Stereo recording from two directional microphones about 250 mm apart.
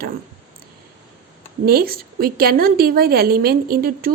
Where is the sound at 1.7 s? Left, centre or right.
Right.